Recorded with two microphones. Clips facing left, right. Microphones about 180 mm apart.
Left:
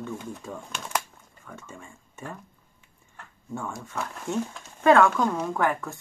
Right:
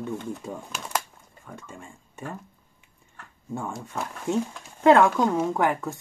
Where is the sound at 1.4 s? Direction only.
15° right (ahead or behind).